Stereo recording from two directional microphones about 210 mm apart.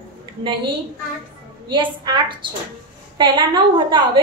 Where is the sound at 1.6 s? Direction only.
20° right (ahead or behind).